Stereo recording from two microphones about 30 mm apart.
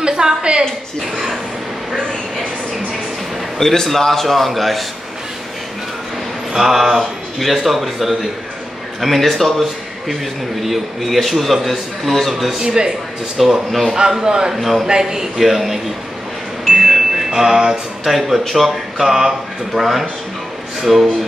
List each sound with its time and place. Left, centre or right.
0.0 s a woman's voice: right
3.5 s a man's voice: centre
6.5 s a man's voice: centre
12.5 s a man's voice: right
13.4 s a man's voice: centre
13.9 s a man's voice: right
14.5 s a man's voice: centre
14.9 s a man's voice: centre
15.3 s a man's voice: centre
16.6 s a sound: centre
18.5 s speech: centre
19.0 s a man's voice: centre